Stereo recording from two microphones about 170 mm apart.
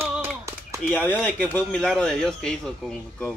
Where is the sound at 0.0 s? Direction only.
15° right (ahead or behind).